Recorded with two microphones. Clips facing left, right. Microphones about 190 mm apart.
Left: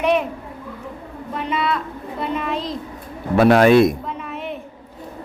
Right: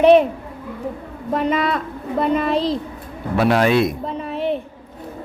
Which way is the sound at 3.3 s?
50° left (ahead or behind).